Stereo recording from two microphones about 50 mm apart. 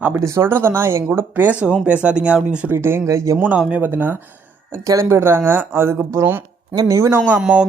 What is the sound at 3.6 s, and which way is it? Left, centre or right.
Speech, right.